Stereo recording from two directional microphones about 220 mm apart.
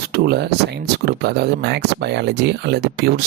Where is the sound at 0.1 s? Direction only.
45° right (ahead or behind).